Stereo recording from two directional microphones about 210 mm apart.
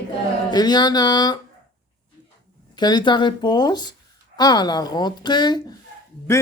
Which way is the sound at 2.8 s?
20° left (ahead or behind).